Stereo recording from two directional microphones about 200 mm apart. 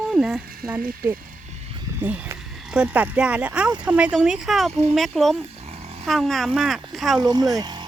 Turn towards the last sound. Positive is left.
turn(degrees=-20)  # may be behind; listen again after turning